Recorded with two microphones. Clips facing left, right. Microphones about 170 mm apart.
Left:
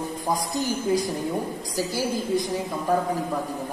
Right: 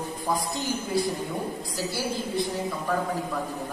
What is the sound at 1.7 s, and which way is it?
Speech, 45° left (ahead or behind).